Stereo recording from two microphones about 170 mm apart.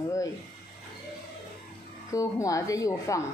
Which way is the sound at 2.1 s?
20° left (ahead or behind).